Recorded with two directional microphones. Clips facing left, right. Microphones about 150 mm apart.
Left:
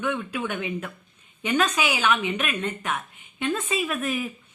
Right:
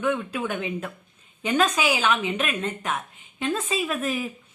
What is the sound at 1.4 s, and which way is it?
A woman's voice, 35° right (ahead or behind).